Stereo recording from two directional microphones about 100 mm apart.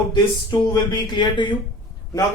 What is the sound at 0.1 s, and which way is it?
Speech, 45° left (ahead or behind).